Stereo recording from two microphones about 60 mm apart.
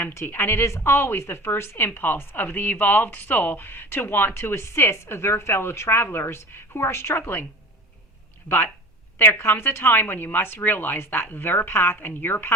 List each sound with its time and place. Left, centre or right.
0.3 s speech: left
8.4 s speech: left